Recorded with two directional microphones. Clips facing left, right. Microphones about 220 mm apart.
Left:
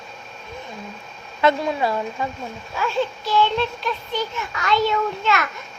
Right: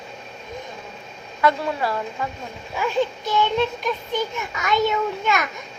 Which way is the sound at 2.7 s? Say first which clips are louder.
Right 1 dB; 15° right (ahead or behind).